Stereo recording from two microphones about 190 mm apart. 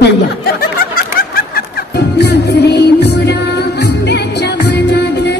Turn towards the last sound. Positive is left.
turn(degrees=65)  # may be behind; listen again after turning